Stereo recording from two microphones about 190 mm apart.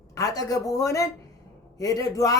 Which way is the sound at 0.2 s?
20° left (ahead or behind).